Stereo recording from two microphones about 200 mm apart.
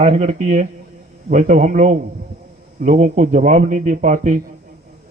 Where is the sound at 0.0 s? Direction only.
35° right (ahead or behind).